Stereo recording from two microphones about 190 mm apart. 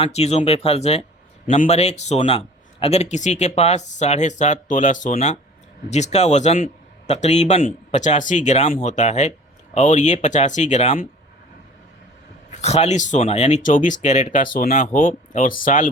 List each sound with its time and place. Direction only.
0.0 s speech: 35° left (ahead or behind)
12.5 s speech: 35° left (ahead or behind)